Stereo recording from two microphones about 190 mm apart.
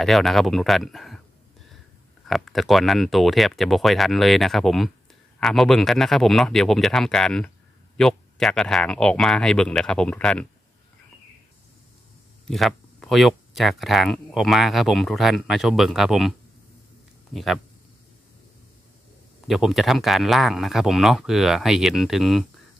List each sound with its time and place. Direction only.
0.0 s speech: centre (ahead or behind)
2.2 s speech: centre (ahead or behind)
12.4 s speech: centre (ahead or behind)
19.4 s speech: centre (ahead or behind)